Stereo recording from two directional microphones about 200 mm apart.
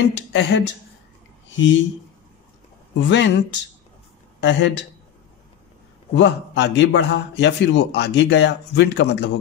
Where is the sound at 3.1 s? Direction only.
60° left (ahead or behind).